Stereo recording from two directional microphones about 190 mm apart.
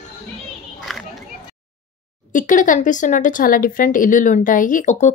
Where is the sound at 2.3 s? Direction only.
45° left (ahead or behind).